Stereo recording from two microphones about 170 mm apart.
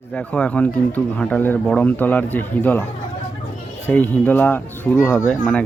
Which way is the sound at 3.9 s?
10° left (ahead or behind).